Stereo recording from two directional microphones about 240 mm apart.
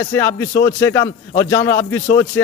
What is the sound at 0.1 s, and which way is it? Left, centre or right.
Speech, centre.